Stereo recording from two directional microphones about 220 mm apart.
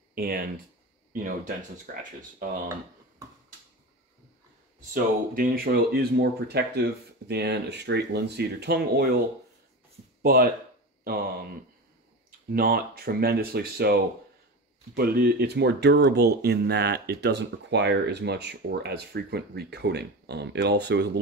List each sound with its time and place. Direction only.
0.1 s speech: 45° right (ahead or behind)
1.9 s speech: 40° right (ahead or behind)
4.9 s speech: 40° right (ahead or behind)
10.2 s speech: 45° right (ahead or behind)
12.4 s speech: 45° right (ahead or behind)
15.0 s speech: 45° right (ahead or behind)